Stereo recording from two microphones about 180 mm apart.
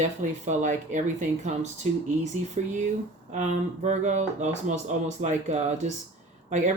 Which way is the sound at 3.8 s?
40° right (ahead or behind).